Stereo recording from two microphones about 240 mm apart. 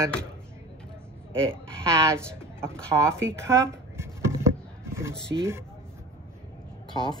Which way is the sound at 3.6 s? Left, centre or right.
Centre.